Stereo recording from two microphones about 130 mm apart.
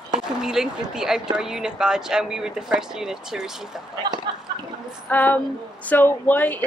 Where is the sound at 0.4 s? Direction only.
5° right (ahead or behind).